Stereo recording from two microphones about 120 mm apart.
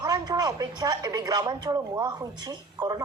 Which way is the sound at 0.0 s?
35° right (ahead or behind).